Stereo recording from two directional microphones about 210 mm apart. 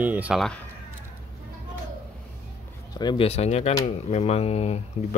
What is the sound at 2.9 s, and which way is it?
Speech, 25° left (ahead or behind).